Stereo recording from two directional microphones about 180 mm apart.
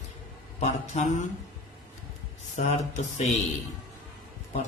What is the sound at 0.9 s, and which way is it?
Speech, 40° left (ahead or behind).